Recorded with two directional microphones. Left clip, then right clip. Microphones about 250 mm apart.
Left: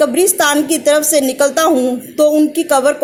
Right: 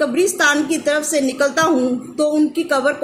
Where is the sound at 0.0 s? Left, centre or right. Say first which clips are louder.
Left 3 dB; centre.